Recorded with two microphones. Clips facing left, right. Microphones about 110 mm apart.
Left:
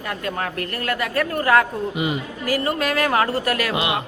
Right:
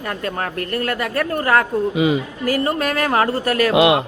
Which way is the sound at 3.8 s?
90° right.